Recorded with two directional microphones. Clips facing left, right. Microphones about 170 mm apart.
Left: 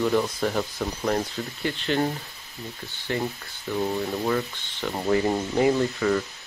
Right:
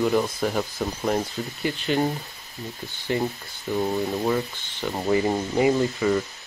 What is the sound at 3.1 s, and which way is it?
Speech, 15° right (ahead or behind).